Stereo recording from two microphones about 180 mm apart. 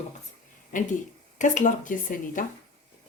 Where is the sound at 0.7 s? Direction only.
45° left (ahead or behind).